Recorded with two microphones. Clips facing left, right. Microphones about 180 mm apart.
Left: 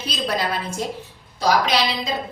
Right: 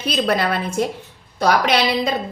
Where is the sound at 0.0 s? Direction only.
60° right (ahead or behind).